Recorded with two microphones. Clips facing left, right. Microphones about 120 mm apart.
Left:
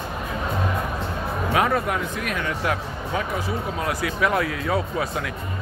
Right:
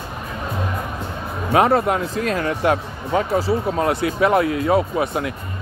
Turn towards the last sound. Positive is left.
turn(degrees=-25)  # may be behind; listen again after turning